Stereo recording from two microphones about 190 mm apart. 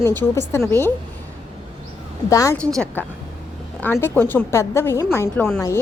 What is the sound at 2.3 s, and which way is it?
A woman's voice, 15° left (ahead or behind).